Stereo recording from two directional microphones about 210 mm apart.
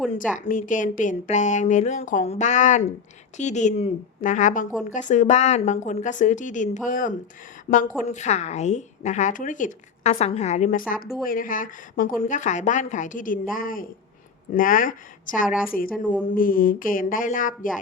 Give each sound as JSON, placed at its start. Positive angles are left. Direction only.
{"t": 0.1, "sound": "a woman's voice", "side_deg": 40}
{"t": 16.2, "sound": "a woman's voice", "side_deg": 40}